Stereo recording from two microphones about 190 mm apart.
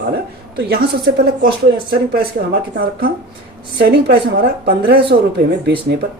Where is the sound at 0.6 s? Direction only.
55° right (ahead or behind).